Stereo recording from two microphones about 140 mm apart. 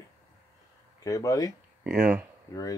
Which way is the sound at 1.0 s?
25° left (ahead or behind).